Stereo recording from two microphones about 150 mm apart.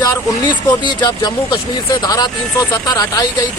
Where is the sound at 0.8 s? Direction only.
25° left (ahead or behind).